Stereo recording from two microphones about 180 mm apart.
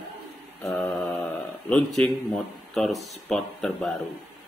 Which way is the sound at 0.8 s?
5° left (ahead or behind).